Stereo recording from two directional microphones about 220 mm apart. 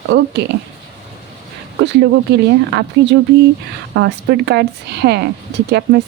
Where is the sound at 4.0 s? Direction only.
50° right (ahead or behind).